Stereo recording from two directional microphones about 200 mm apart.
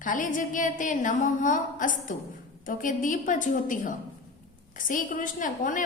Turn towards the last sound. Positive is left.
turn(degrees=40)  # may be behind; listen again after turning